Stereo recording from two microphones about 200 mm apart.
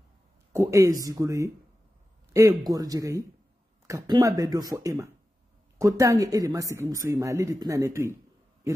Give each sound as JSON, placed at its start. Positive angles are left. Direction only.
{"t": 0.5, "sound": "a woman's voice", "side_deg": -15}